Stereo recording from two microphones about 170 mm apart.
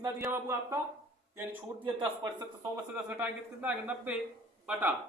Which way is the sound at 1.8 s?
25° right (ahead or behind).